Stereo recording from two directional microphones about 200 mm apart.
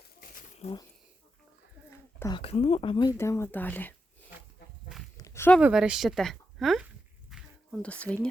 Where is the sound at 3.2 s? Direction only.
15° left (ahead or behind).